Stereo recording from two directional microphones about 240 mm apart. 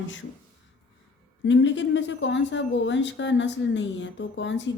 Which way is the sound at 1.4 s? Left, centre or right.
Left.